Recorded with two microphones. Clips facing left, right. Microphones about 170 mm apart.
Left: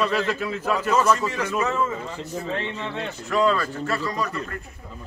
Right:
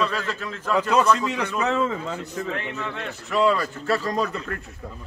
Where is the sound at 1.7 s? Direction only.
75° right (ahead or behind).